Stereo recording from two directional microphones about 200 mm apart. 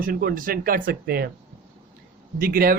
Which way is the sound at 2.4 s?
45° right (ahead or behind).